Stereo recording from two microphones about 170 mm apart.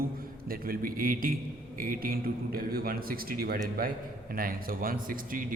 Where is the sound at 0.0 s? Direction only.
60° right (ahead or behind).